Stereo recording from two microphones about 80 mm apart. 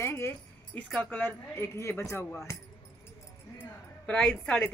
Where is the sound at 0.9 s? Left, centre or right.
Left.